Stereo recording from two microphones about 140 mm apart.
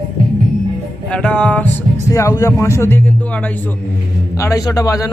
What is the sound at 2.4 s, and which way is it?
A man's voice, 20° left (ahead or behind).